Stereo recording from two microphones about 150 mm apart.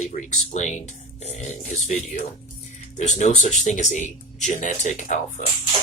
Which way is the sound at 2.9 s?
50° left (ahead or behind).